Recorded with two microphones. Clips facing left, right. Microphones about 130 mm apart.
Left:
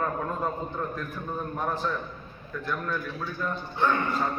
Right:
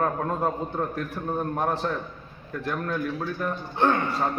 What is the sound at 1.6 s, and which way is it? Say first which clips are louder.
Speech: right 2 dB; 75° right (ahead or behind).